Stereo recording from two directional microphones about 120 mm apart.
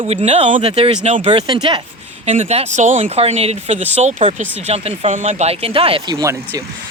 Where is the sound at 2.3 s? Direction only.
65° right (ahead or behind); by 3.2 s 90° right.